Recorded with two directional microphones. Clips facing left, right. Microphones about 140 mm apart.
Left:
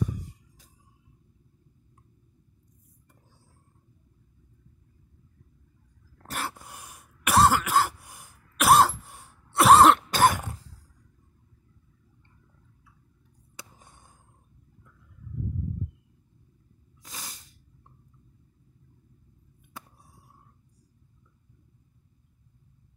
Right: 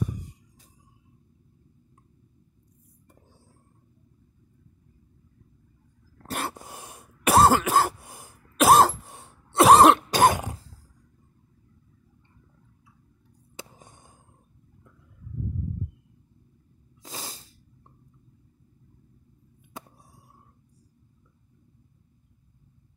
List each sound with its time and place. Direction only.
6.2 s throat clearing: 25° right (ahead or behind)
13.6 s a sound: 20° right (ahead or behind)
17.0 s snort: 30° right (ahead or behind)